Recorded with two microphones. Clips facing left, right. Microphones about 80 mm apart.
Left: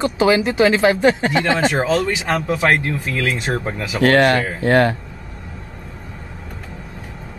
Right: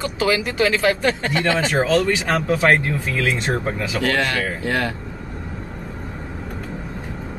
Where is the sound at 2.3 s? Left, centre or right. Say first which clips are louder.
Even; centre.